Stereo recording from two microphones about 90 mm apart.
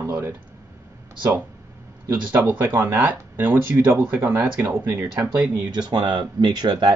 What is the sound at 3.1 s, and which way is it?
Speech, 20° right (ahead or behind).